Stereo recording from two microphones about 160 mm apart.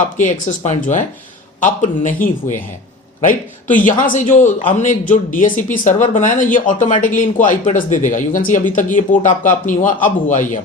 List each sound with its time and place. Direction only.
0.0 s a man's voice: 50° left (ahead or behind)